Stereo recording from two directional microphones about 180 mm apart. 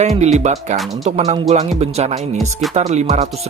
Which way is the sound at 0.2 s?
40° right (ahead or behind).